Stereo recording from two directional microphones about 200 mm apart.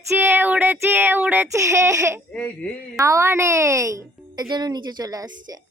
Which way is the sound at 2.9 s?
15° right (ahead or behind).